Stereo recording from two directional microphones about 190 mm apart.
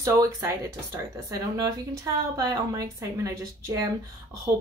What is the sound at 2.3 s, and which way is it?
Speech, 20° right (ahead or behind).